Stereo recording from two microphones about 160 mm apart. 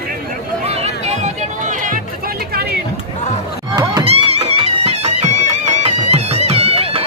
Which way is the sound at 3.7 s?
25° right (ahead or behind).